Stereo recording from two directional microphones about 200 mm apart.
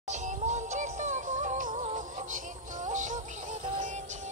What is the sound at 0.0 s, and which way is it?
Synthetic singing, 35° right (ahead or behind).